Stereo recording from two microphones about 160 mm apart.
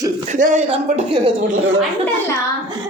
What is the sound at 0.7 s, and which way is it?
Speech, 40° right (ahead or behind).